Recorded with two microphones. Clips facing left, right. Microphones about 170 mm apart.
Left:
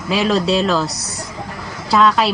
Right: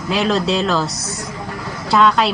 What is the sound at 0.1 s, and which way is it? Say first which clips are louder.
Speech: left 1 dB; centre (ahead or behind).